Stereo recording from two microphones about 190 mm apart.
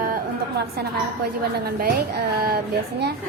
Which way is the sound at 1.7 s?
50° right (ahead or behind).